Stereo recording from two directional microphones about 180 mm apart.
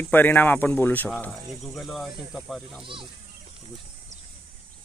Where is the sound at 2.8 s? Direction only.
30° right (ahead or behind).